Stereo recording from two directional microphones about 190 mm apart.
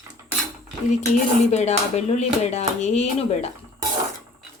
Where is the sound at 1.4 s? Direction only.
35° left (ahead or behind).